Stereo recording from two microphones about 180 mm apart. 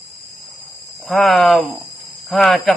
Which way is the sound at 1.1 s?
Centre (ahead or behind).